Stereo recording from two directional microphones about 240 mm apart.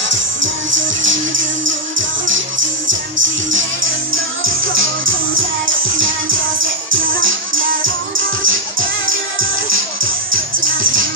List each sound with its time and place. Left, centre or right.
0.1 s music: right
10.3 s music: right